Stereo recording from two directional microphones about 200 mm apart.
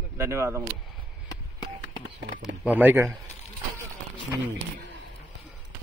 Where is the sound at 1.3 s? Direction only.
20° left (ahead or behind).